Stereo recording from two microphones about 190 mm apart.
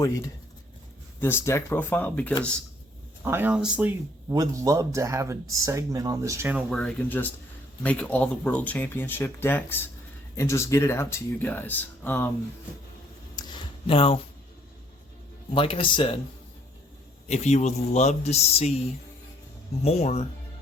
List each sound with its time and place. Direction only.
1.2 s speech: 10° left (ahead or behind)
3.2 s speech: 10° right (ahead or behind)
6.7 s speech: 5° left (ahead or behind)
13.3 s a sound: 20° left (ahead or behind)
15.5 s speech: 25° left (ahead or behind)
17.2 s a man's voice: 35° left (ahead or behind)